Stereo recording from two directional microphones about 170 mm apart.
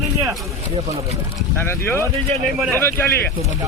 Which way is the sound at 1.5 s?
15° left (ahead or behind).